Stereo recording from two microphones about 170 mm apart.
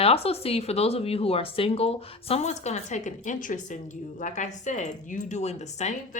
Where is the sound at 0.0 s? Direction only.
35° left (ahead or behind).